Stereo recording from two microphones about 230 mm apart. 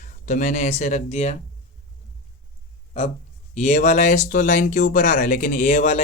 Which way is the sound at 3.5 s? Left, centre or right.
Left.